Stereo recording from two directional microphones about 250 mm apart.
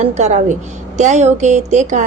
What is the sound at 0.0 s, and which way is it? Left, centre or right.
A woman's voice, right.